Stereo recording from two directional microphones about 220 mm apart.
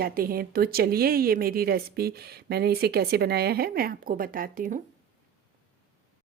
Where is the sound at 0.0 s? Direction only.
40° right (ahead or behind).